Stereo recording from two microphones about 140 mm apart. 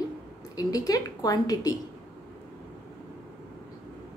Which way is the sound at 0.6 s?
25° left (ahead or behind).